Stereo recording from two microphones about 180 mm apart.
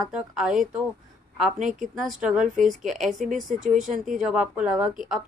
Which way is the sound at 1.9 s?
Centre (ahead or behind).